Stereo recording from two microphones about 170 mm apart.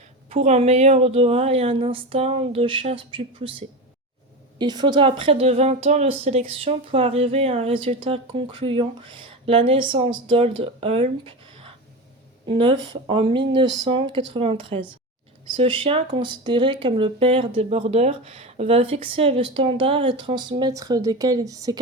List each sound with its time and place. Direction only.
0.3 s speech: 40° right (ahead or behind)
4.5 s speech: 25° right (ahead or behind)